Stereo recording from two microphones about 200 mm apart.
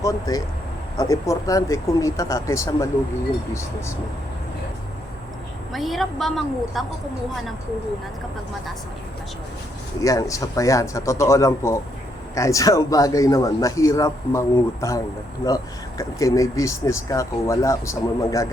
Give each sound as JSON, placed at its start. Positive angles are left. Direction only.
{"t": 0.0, "sound": "speech", "side_deg": 15}
{"t": 5.7, "sound": "a woman's voice", "side_deg": 0}
{"t": 10.0, "sound": "speech", "side_deg": 15}